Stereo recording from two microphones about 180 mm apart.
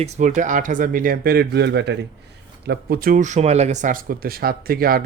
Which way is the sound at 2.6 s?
55° right (ahead or behind).